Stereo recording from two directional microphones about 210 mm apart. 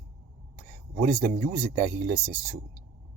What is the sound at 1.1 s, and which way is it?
Speech, 45° right (ahead or behind).